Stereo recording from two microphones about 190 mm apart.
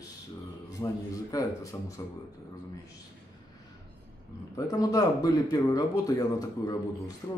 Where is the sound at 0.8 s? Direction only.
20° left (ahead or behind).